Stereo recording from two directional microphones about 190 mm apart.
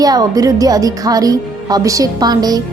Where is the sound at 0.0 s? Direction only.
20° right (ahead or behind).